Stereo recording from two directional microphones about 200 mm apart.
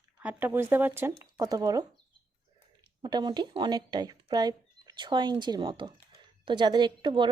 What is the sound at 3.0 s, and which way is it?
Speech, 20° right (ahead or behind).